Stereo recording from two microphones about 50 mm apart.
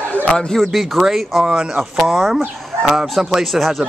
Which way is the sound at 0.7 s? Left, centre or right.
Centre.